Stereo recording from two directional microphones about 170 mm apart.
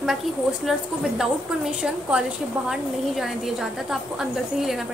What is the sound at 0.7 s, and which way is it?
A woman's voice, centre (ahead or behind).